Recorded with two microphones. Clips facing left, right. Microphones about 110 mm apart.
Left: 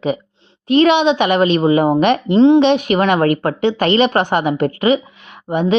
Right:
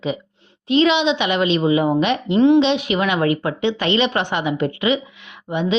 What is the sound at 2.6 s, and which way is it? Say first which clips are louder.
A woman's voice: left 5 dB; 50° left (ahead or behind).